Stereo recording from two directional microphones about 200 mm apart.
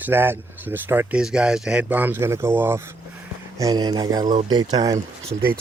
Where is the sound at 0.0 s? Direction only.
10° right (ahead or behind).